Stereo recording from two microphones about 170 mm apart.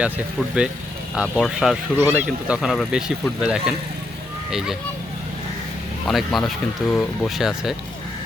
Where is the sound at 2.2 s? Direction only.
Centre (ahead or behind).